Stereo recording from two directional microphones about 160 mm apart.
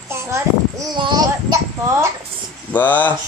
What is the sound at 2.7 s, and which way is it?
Speech, 10° left (ahead or behind).